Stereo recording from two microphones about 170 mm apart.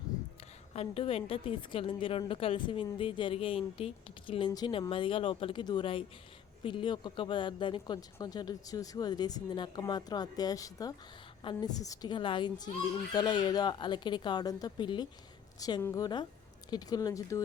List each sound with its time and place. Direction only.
0.7 s a woman's voice: 35° left (ahead or behind); by 17.4 s 20° left (ahead or behind)